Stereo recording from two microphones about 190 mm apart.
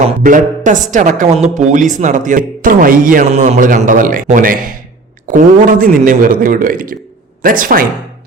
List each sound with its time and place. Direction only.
0.3 s a woman's voice: 45° right (ahead or behind)